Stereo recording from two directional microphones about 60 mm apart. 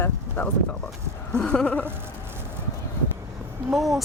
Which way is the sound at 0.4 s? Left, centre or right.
Left.